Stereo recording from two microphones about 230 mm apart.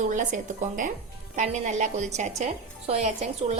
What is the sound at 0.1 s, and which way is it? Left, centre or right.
A woman's voice, right.